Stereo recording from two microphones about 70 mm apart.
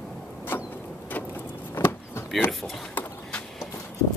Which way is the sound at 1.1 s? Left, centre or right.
Left.